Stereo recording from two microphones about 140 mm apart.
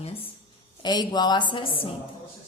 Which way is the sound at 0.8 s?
30° left (ahead or behind).